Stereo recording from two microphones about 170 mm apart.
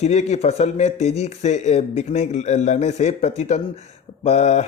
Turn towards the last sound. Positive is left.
turn(degrees=45)  # may be behind; listen again after turning